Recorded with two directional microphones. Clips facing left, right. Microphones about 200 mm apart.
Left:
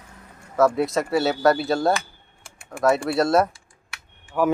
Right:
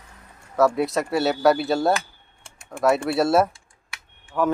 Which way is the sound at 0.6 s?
Centre (ahead or behind).